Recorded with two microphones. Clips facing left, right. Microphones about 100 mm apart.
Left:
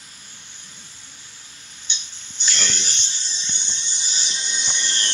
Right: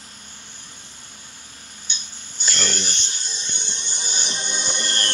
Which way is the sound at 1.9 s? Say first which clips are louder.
Left 1 dB; 45° right (ahead or behind).